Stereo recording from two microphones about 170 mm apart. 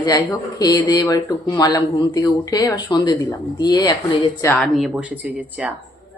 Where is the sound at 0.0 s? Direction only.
20° left (ahead or behind).